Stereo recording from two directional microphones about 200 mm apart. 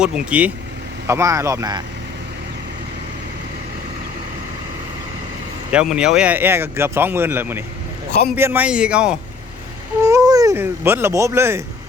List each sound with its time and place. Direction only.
0.0 s speech: 5° right (ahead or behind)
5.7 s a man's voice: 5° right (ahead or behind)
10.0 s speech: 15° right (ahead or behind)